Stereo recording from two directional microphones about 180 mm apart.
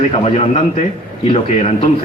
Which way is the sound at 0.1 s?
35° left (ahead or behind).